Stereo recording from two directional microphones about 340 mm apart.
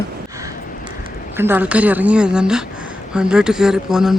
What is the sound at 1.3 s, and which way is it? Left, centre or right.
Speech, centre.